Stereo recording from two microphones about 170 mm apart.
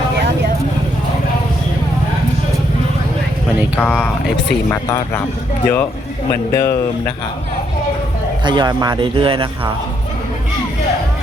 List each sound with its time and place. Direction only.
3.8 s speech: 5° left (ahead or behind)
8.4 s speech: 25° right (ahead or behind)